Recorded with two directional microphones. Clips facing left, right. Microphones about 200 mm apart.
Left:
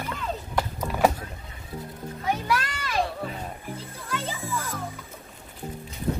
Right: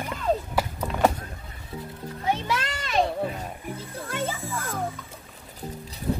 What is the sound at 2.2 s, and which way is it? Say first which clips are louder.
Music: even; 25° right (ahead or behind).